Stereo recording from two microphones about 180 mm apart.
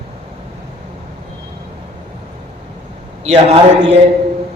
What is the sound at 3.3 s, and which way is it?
Speech, 35° right (ahead or behind).